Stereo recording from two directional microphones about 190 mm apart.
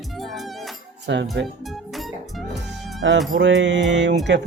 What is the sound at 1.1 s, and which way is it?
Speech, 70° right (ahead or behind).